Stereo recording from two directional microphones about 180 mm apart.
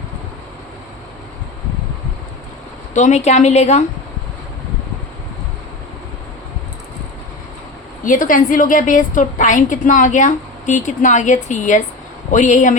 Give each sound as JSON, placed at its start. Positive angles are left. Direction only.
{"t": 2.9, "sound": "a woman's voice", "side_deg": 40}
{"t": 8.0, "sound": "a woman's voice", "side_deg": 50}